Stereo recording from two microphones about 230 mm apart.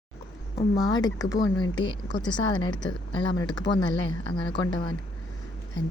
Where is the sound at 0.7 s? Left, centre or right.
Centre.